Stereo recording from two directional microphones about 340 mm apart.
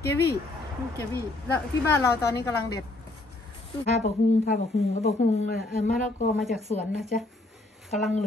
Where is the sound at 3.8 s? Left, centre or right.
Left.